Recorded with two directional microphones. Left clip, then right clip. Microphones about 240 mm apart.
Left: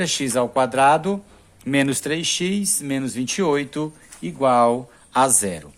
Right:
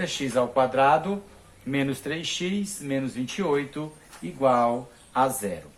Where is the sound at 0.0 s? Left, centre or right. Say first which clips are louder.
Left 4 dB; left.